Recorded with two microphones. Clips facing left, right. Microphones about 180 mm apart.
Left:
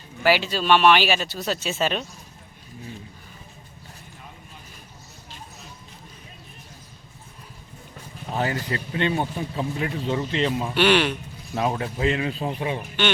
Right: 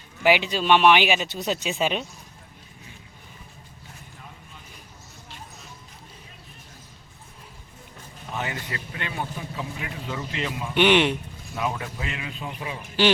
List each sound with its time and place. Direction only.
0.2 s speech: 15° right (ahead or behind)
8.4 s a man's voice: 35° left (ahead or behind)
10.8 s speech: 20° right (ahead or behind)
11.5 s a man's voice: 35° left (ahead or behind)